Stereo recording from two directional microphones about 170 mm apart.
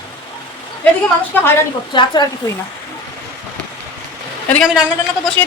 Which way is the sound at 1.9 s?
25° left (ahead or behind).